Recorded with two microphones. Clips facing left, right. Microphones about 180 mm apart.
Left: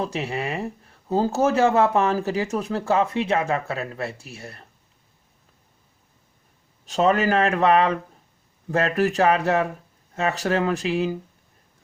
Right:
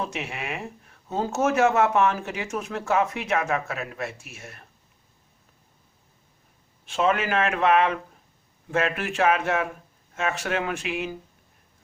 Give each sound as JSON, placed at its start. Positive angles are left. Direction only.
{"t": 0.0, "sound": "speech", "side_deg": 35}
{"t": 6.8, "sound": "speech", "side_deg": 40}